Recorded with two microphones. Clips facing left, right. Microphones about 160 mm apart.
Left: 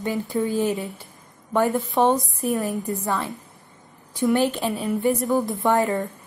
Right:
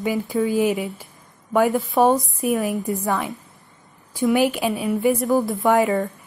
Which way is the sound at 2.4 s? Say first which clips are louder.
Right 3 dB; 15° right (ahead or behind).